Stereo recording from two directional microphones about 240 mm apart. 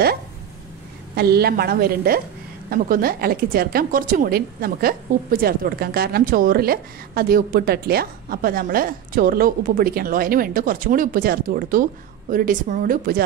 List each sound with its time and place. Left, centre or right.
1.1 s a woman's voice: right